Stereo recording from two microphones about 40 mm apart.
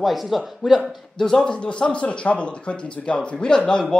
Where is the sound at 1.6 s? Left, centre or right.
Left.